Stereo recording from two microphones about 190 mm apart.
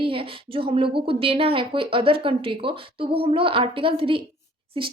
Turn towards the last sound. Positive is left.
turn(degrees=-25)  # may be behind; listen again after turning